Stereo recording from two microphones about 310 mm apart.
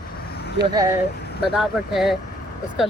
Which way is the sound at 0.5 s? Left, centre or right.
Centre.